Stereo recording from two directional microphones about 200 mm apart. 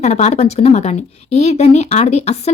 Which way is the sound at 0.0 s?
35° left (ahead or behind).